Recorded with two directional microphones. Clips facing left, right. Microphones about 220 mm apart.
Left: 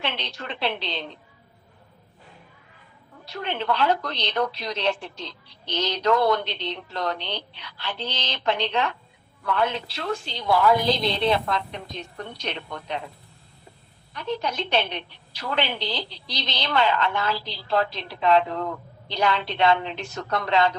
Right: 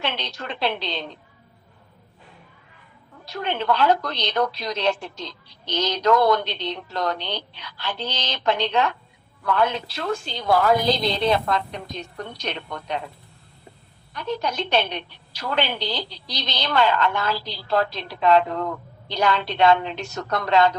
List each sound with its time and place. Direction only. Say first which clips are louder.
0.0 s a woman's voice: right 2 dB; 40° right (ahead or behind)
3.2 s a woman's voice: right 3 dB; 45° right (ahead or behind)
14.1 s a woman's voice: right 1 dB; 45° right (ahead or behind)